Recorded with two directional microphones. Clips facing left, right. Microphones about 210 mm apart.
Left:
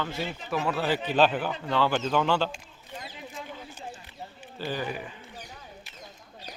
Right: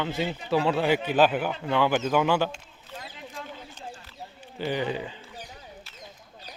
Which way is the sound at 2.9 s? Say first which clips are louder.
Even; centre (ahead or behind).